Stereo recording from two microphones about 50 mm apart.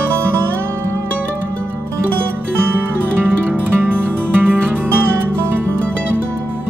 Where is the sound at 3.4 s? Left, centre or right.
Right.